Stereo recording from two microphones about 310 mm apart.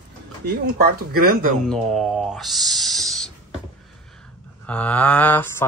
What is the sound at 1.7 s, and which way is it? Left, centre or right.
Speech, centre.